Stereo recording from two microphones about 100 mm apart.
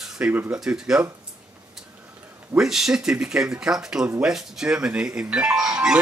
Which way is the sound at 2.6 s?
5° right (ahead or behind).